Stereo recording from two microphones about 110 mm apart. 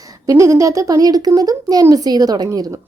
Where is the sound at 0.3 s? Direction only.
25° right (ahead or behind).